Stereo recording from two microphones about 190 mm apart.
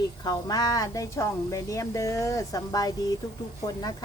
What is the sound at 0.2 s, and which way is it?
A woman's voice, 20° left (ahead or behind).